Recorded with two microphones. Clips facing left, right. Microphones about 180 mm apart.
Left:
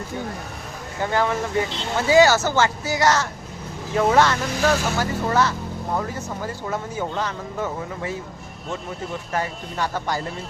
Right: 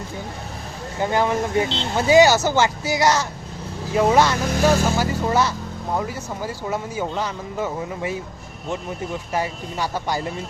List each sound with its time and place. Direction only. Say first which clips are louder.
0.9 s speech: right 2 dB; 15° right (ahead or behind)
9.3 s speech: right 1 dB; 10° right (ahead or behind)